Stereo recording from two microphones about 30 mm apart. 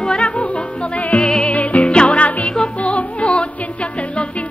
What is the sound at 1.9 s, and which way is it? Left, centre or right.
Music, left.